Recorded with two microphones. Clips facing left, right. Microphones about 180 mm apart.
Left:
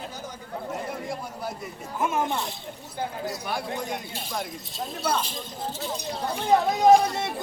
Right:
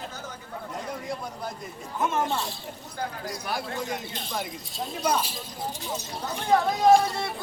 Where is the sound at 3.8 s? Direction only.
5° left (ahead or behind).